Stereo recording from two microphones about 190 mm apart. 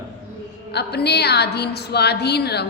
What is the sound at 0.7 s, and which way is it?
A woman's voice, 60° left (ahead or behind).